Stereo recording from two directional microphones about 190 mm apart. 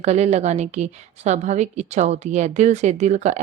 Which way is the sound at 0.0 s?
35° right (ahead or behind).